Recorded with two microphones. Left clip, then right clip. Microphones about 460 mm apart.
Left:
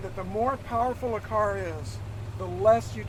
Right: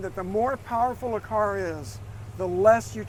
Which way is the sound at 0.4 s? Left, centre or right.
Right.